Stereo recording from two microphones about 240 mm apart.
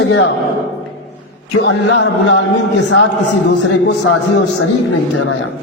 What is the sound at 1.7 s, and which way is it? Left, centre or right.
A man's voice, left.